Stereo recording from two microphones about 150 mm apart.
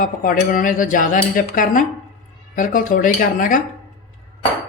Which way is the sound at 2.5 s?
65° left (ahead or behind).